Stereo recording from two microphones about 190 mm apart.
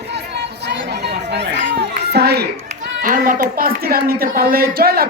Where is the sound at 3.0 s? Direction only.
45° right (ahead or behind).